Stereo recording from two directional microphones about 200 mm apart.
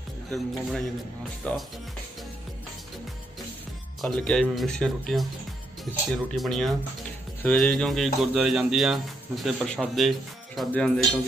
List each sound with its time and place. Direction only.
0.3 s speech: centre (ahead or behind)
4.0 s speech: 5° left (ahead or behind)
6.3 s speech: centre (ahead or behind)